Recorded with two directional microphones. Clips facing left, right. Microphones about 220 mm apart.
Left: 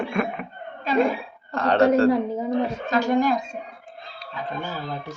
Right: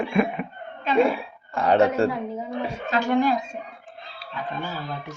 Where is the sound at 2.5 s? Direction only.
40° left (ahead or behind).